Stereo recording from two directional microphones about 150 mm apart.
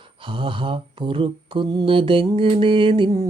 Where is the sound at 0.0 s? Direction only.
35° right (ahead or behind).